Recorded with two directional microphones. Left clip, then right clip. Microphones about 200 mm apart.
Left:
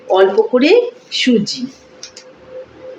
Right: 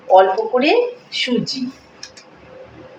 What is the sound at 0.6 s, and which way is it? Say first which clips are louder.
Speech: left 4 dB; 55° left (ahead or behind).